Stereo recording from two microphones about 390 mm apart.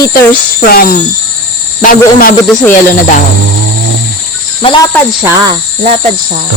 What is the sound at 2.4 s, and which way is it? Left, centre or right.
Speech, centre.